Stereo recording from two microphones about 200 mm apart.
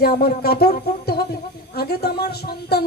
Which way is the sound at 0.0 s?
50° left (ahead or behind).